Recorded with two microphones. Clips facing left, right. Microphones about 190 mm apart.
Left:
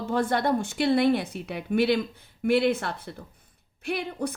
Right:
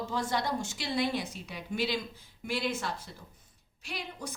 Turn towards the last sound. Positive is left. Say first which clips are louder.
# left 11 dB
turn(degrees=60)  # may be behind; listen again after turning